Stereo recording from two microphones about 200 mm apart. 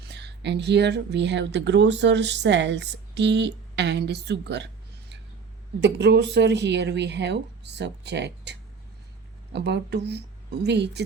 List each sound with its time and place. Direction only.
0.1 s a woman's voice: 60° right (ahead or behind)